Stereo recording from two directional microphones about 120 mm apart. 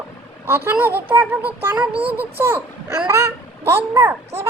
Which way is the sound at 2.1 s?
15° right (ahead or behind).